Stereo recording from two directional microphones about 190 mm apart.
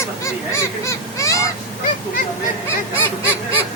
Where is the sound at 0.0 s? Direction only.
15° left (ahead or behind).